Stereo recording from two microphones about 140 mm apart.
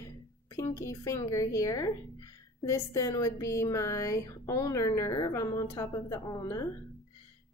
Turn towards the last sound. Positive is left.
turn(degrees=25)  # may be behind; listen again after turning